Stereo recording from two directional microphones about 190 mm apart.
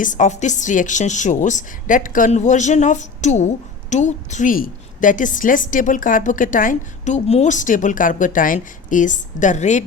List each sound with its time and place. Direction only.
0.0 s a woman's voice: 40° left (ahead or behind)